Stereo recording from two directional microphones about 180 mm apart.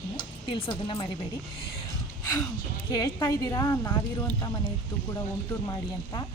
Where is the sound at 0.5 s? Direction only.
25° left (ahead or behind).